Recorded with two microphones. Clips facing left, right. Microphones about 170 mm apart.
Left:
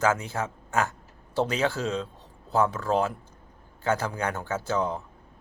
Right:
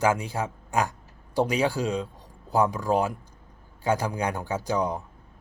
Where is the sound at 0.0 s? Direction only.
15° right (ahead or behind).